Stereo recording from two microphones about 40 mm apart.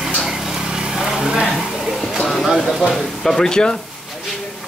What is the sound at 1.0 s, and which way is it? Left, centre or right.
Vehicle, centre.